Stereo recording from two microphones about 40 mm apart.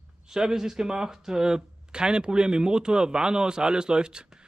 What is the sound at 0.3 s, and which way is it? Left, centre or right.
Speech, centre.